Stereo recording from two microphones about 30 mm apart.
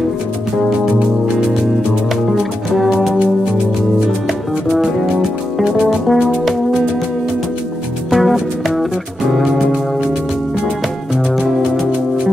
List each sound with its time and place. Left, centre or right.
2.3 s music: centre
5.6 s music: right
8.1 s music: centre